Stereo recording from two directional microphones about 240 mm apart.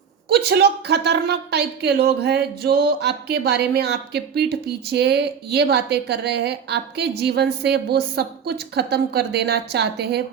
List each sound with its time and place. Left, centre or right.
0.3 s a woman's voice: right